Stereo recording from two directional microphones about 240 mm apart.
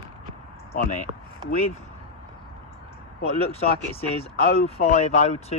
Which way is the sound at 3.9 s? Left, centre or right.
Left.